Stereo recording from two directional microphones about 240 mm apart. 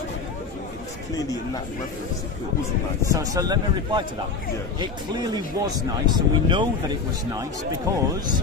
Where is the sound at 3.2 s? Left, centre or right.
Centre.